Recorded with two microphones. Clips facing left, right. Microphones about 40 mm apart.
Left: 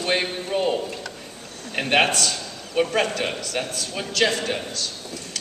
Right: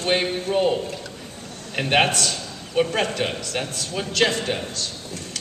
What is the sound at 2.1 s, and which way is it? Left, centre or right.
Speech, right.